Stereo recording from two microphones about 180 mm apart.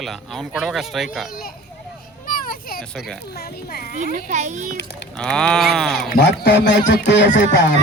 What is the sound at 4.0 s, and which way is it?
Speech, 45° right (ahead or behind).